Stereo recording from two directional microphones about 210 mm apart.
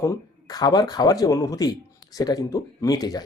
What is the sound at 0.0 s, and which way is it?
Speech, 15° left (ahead or behind).